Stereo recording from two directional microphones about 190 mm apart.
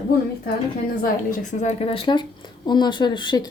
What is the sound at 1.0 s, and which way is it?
A woman's voice, 45° left (ahead or behind).